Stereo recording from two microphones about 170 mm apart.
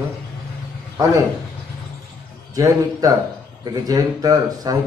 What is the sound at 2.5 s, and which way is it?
A man's voice, 20° right (ahead or behind).